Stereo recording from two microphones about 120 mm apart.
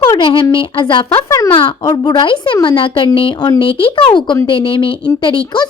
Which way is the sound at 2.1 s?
40° left (ahead or behind).